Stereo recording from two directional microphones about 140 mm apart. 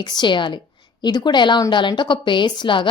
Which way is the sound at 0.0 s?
30° left (ahead or behind).